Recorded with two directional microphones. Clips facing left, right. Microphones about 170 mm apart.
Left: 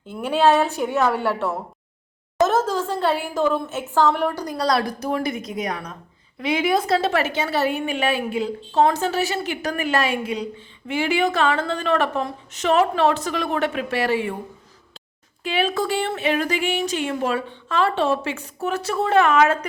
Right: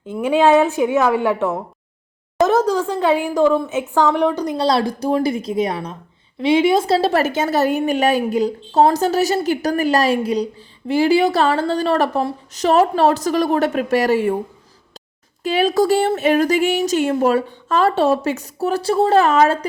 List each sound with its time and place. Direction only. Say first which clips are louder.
0.3 s a woman's voice: right 4 dB; 15° right (ahead or behind); by 14.3 s 40° right (ahead or behind)
15.4 s speech: right 7 dB; 40° right (ahead or behind)